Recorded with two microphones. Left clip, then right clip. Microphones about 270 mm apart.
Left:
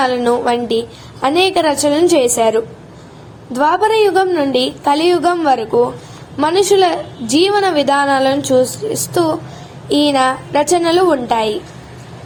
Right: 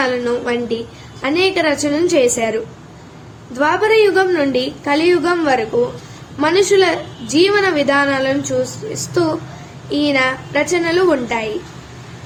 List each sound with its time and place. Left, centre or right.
0.0 s a woman's voice: left